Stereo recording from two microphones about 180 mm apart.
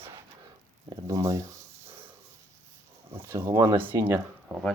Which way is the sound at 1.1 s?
15° right (ahead or behind).